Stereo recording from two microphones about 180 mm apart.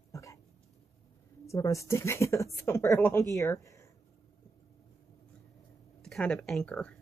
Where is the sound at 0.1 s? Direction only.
15° left (ahead or behind).